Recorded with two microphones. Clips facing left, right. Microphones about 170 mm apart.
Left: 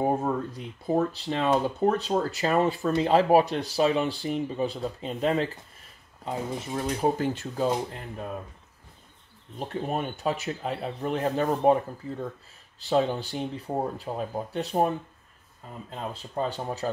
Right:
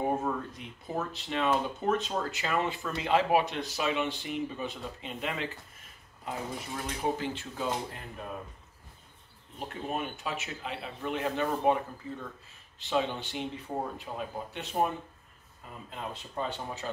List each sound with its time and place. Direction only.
0.2 s speech: 35° left (ahead or behind)
7.0 s speech: 45° left (ahead or behind)
9.6 s speech: 35° left (ahead or behind)
12.8 s speech: 40° left (ahead or behind)
15.9 s speech: 35° left (ahead or behind)